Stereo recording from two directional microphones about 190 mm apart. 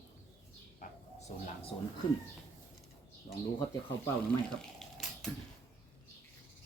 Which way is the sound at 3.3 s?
30° left (ahead or behind).